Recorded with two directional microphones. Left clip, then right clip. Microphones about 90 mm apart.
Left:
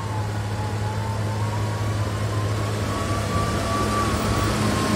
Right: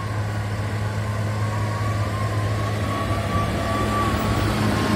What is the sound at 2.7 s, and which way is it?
Vehicle, 45° left (ahead or behind).